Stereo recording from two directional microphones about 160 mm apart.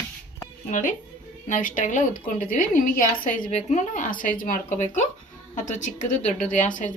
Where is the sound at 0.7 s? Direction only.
50° left (ahead or behind).